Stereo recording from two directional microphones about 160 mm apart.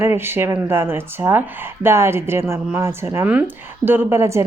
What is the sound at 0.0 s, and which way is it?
A woman's voice, 15° right (ahead or behind).